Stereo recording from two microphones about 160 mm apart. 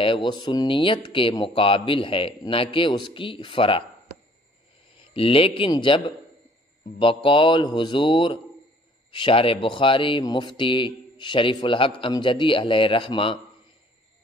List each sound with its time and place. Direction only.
0.0 s speech: 30° left (ahead or behind)
4.9 s a man's voice: 35° left (ahead or behind)
7.2 s speech: 30° left (ahead or behind)